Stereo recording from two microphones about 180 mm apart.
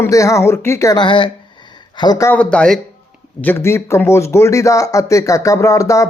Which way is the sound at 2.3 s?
5° left (ahead or behind).